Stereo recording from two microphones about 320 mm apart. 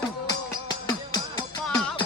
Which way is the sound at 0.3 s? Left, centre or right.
Centre.